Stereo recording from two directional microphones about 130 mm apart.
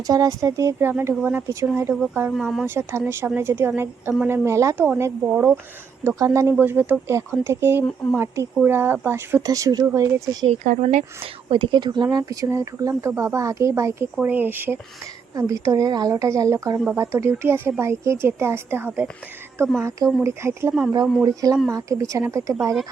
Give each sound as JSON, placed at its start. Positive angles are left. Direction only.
{"t": 0.1, "sound": "speech", "side_deg": -25}
{"t": 2.3, "sound": "speech", "side_deg": 0}
{"t": 2.6, "sound": "a woman's voice", "side_deg": -20}
{"t": 10.6, "sound": "speech", "side_deg": -75}
{"t": 11.2, "sound": "a woman's voice", "side_deg": -40}
{"t": 21.0, "sound": "speech", "side_deg": -5}
{"t": 21.2, "sound": "speech", "side_deg": -30}